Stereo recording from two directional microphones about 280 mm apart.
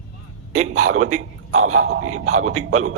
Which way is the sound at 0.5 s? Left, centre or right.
Right.